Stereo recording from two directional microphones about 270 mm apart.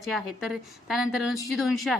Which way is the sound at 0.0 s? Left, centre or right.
Centre.